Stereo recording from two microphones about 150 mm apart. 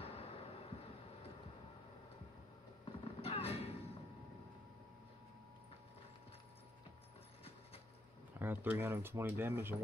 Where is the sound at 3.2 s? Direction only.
40° left (ahead or behind).